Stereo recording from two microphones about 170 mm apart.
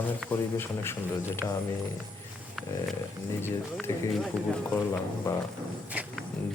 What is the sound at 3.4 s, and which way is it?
Speech, 15° left (ahead or behind).